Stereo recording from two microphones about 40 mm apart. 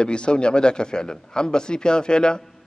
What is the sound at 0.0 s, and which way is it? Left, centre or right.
Speech, left.